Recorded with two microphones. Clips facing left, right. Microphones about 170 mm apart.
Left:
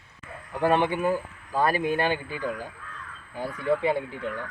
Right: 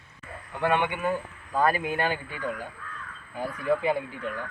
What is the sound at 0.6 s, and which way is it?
Speech, 35° left (ahead or behind).